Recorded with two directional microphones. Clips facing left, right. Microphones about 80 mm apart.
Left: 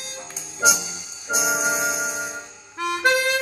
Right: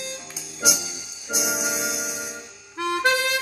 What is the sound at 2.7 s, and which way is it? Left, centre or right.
Harmonica, left.